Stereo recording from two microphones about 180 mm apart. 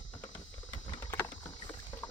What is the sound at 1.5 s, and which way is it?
Rowboat, 20° left (ahead or behind).